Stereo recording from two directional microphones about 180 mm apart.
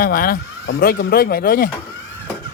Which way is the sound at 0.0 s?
55° left (ahead or behind).